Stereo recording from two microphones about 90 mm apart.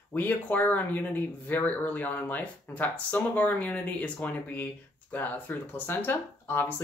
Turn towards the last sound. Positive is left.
turn(degrees=25)  # may be behind; listen again after turning